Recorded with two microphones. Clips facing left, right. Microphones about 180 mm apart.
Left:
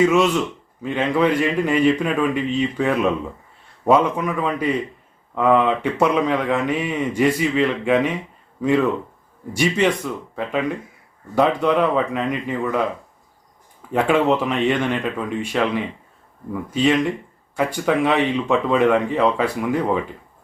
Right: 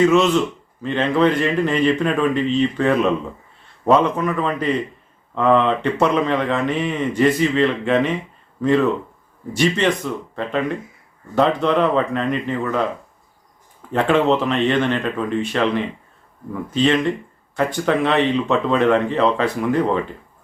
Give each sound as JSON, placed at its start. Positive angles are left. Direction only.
{"t": 0.0, "sound": "speech", "side_deg": 10}
{"t": 13.9, "sound": "speech", "side_deg": 10}